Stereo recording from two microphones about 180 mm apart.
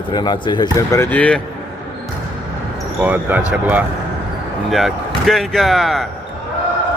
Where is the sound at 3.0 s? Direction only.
10° right (ahead or behind).